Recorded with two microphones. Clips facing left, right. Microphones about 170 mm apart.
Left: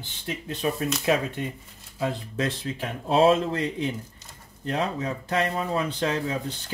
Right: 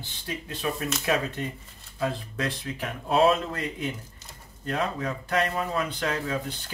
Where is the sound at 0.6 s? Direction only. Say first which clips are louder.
Left 3 dB; 25° left (ahead or behind).